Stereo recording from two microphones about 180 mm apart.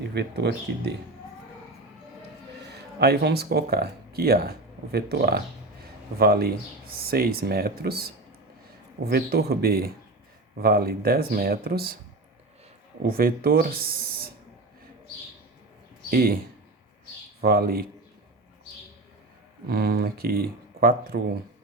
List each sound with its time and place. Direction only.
0.1 s speech: 70° right (ahead or behind)
3.0 s speech: 65° right (ahead or behind)
13.0 s speech: 55° right (ahead or behind)
16.0 s speech: 55° right (ahead or behind)
17.4 s speech: 55° right (ahead or behind)
19.6 s speech: 60° right (ahead or behind)